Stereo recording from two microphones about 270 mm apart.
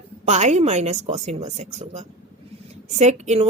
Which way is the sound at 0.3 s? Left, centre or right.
Right.